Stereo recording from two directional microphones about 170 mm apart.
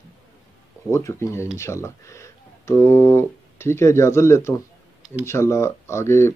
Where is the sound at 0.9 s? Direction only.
15° left (ahead or behind).